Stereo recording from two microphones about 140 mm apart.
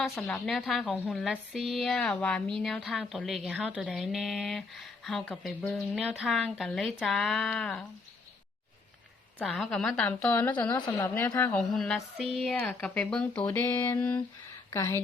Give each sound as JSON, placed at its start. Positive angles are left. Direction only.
{"t": 0.2, "sound": "a woman's voice", "side_deg": 5}
{"t": 9.4, "sound": "speech", "side_deg": 5}
{"t": 10.8, "sound": "a woman's voice", "side_deg": 30}
{"t": 11.0, "sound": "speech", "side_deg": 15}
{"t": 11.4, "sound": "speech", "side_deg": 5}